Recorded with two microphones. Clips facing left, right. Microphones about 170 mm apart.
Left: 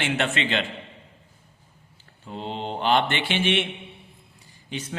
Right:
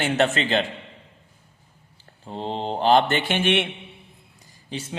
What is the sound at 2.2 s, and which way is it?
A man's voice, 35° right (ahead or behind).